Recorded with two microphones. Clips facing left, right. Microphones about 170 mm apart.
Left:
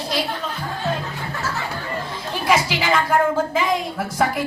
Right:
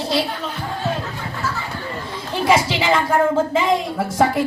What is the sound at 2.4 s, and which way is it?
A woman's voice, 25° right (ahead or behind).